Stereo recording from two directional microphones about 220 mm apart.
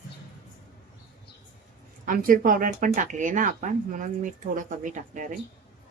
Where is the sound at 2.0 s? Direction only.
40° right (ahead or behind).